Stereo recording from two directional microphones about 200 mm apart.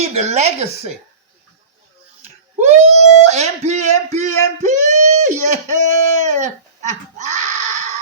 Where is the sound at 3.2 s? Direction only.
35° right (ahead or behind).